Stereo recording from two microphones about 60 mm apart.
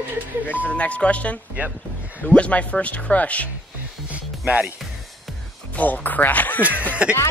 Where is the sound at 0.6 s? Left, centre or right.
Left.